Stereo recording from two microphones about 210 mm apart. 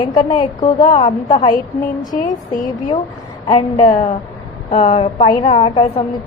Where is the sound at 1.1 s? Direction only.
35° left (ahead or behind).